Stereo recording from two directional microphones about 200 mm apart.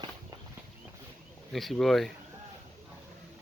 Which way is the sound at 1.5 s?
Centre (ahead or behind).